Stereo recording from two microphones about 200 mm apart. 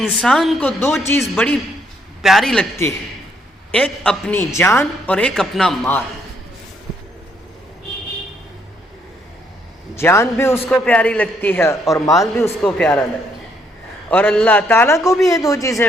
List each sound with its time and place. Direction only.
0.0 s a man's voice: centre (ahead or behind)
3.7 s a man's voice: 5° left (ahead or behind)
9.9 s a man's voice: 15° left (ahead or behind)
14.1 s a man's voice: 10° left (ahead or behind)